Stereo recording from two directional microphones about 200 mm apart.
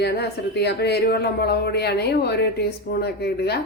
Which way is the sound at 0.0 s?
55° left (ahead or behind).